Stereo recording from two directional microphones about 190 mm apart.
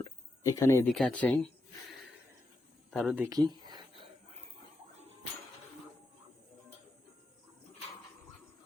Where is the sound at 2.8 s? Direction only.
5° right (ahead or behind); by 3.9 s 20° right (ahead or behind).